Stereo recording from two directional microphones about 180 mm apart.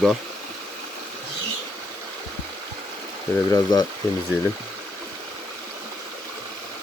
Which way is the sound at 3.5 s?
20° left (ahead or behind).